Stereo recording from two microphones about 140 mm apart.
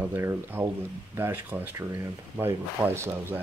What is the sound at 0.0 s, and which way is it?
Speech, 15° right (ahead or behind).